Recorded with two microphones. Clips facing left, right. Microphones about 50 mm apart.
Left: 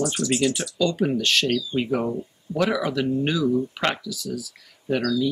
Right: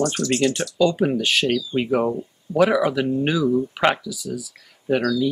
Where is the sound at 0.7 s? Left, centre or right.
Centre.